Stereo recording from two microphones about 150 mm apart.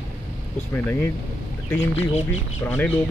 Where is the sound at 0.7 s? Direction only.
15° left (ahead or behind).